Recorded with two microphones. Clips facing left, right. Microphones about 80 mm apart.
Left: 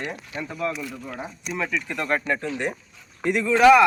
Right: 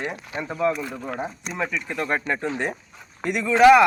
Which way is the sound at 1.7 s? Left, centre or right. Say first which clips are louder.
Left 1 dB; right.